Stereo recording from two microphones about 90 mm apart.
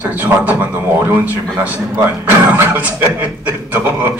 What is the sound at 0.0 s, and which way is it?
Speech, 20° right (ahead or behind).